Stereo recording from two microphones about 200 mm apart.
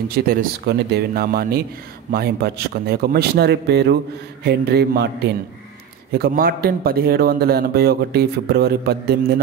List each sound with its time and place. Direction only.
0.1 s a man's voice: 45° right (ahead or behind)